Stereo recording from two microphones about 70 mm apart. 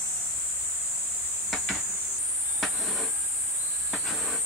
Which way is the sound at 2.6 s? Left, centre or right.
Centre.